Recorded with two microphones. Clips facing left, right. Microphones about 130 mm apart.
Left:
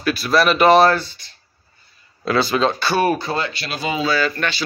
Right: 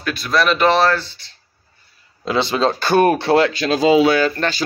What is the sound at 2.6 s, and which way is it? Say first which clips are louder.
Speech: right 3 dB; 50° right (ahead or behind).